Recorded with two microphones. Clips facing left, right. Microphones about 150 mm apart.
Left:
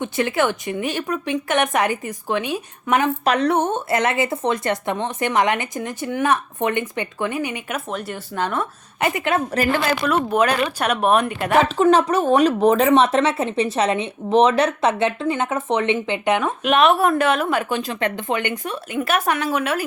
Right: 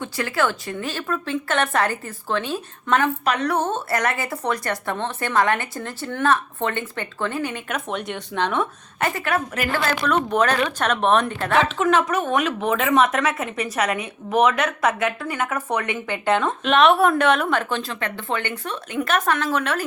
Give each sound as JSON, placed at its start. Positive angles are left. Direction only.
{"t": 0.0, "sound": "speech", "side_deg": 20}
{"t": 7.9, "sound": "speech", "side_deg": 5}
{"t": 9.0, "sound": "speech", "side_deg": 20}
{"t": 11.8, "sound": "speech", "side_deg": 35}